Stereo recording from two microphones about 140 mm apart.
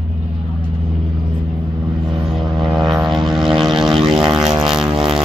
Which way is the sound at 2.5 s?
35° right (ahead or behind).